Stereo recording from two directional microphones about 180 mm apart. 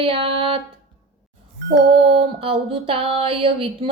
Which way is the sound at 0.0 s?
30° right (ahead or behind).